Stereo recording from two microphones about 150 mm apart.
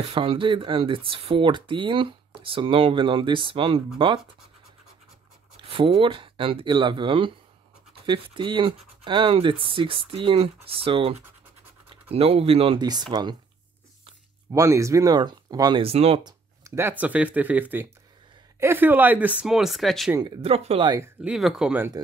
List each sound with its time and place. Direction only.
0.1 s speech: 35° right (ahead or behind)
5.6 s speech: 35° right (ahead or behind)
12.8 s speech: 25° right (ahead or behind)
14.5 s speech: 20° right (ahead or behind)
15.8 s speech: 40° right (ahead or behind)
16.3 s a sound: 20° right (ahead or behind)
17.0 s speech: 10° right (ahead or behind)
20.4 s speech: 40° right (ahead or behind)
21.2 s speech: 5° right (ahead or behind)